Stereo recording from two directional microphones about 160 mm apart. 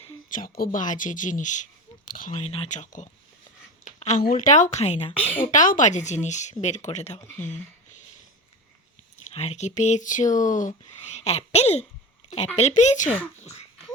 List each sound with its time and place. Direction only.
0.3 s speech: 65° left (ahead or behind)
2.4 s speech: 40° left (ahead or behind)
2.8 s speech: 50° left (ahead or behind)
4.2 s speech: 60° left (ahead or behind)
5.1 s speech: 10° left (ahead or behind)
5.4 s speech: 55° left (ahead or behind)
9.1 s speech: 40° left (ahead or behind)